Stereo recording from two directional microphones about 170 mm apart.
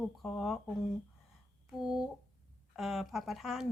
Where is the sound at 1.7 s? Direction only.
5° right (ahead or behind).